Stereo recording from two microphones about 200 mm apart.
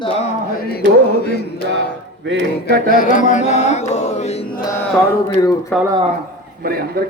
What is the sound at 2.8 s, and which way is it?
Music, 40° left (ahead or behind).